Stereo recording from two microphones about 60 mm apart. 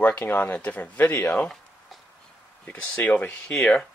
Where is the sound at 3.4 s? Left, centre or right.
Centre.